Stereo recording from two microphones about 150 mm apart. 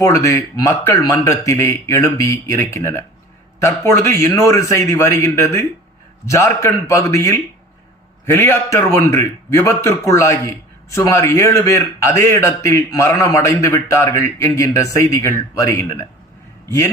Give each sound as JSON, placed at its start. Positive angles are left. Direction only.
{"t": 0.1, "sound": "a man's voice", "side_deg": 20}